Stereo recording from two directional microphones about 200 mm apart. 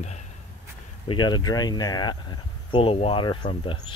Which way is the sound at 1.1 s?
20° left (ahead or behind).